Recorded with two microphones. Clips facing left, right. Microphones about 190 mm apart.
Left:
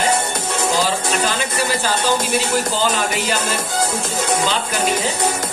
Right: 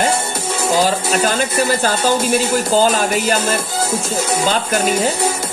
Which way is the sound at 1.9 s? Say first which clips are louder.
Right 3 dB; 10° right (ahead or behind).